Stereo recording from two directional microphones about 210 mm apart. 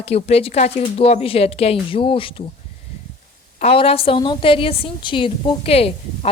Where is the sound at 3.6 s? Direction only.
30° left (ahead or behind).